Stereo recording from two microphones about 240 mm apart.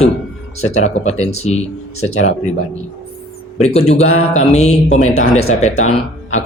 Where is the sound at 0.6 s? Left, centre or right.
Left.